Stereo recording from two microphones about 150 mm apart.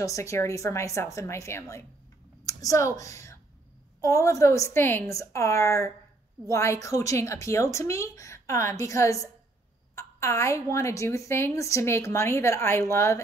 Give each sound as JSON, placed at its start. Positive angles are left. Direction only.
{"t": 0.0, "sound": "a woman's voice", "side_deg": 20}